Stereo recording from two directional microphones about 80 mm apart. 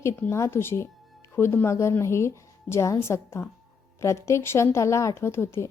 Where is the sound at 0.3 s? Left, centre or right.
Left.